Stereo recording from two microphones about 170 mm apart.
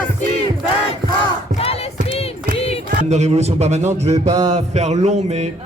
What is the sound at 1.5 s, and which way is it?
Music, 35° left (ahead or behind).